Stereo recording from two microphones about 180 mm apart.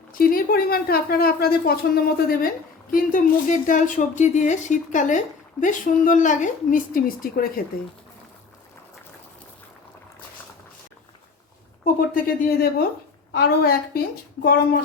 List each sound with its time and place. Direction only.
0.1 s a woman's voice: 50° left (ahead or behind)
11.9 s a woman's voice: 50° left (ahead or behind)